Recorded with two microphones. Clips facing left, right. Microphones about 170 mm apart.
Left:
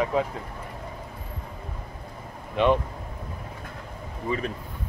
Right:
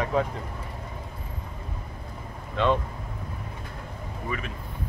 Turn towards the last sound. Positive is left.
turn(degrees=35)  # may be behind; listen again after turning